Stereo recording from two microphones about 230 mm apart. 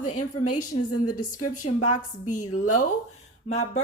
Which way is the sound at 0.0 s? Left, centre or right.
Left.